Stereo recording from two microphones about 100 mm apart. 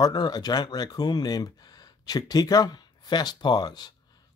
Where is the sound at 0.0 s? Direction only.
45° left (ahead or behind).